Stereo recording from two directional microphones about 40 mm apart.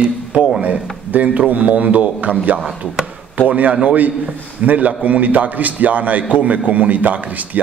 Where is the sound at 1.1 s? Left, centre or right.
Right.